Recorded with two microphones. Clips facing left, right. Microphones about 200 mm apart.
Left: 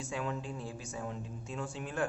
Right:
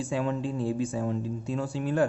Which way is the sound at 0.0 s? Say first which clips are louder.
Right 9 dB; 30° right (ahead or behind).